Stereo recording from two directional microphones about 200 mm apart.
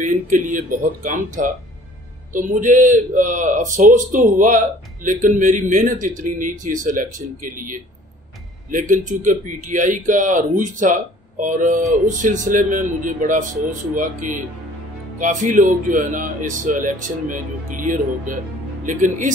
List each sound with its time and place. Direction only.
0.0 s speech: 40° right (ahead or behind)